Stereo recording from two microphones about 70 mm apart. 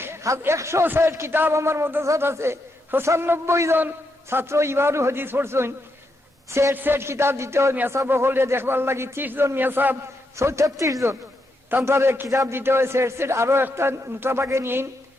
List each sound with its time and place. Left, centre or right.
0.0 s a man's voice: right
6.7 s a man's voice: right
10.3 s a man's voice: right
11.9 s a man's voice: right